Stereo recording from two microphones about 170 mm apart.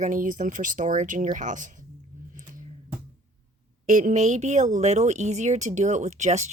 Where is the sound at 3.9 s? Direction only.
50° right (ahead or behind).